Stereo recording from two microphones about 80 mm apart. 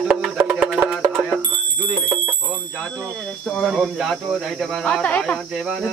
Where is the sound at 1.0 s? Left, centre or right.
Centre.